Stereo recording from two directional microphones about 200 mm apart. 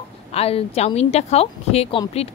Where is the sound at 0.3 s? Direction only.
30° left (ahead or behind).